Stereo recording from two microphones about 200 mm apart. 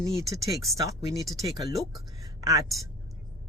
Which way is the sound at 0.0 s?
15° right (ahead or behind).